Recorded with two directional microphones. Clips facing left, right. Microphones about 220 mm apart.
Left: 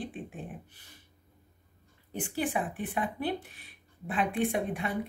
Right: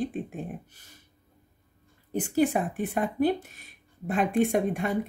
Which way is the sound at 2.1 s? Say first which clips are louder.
Right 7 dB; 45° right (ahead or behind).